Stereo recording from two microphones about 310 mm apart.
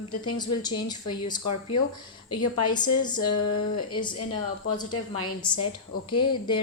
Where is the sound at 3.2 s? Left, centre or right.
Left.